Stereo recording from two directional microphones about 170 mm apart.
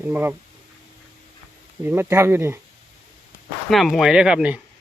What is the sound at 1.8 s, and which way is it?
Speech, 15° right (ahead or behind).